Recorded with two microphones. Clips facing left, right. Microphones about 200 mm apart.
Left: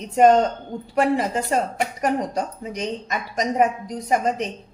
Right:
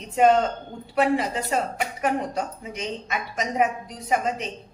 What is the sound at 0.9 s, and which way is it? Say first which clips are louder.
A woman's voice: left 2 dB; 45° left (ahead or behind).